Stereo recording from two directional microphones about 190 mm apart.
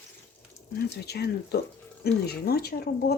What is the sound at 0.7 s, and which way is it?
Speech, 55° left (ahead or behind).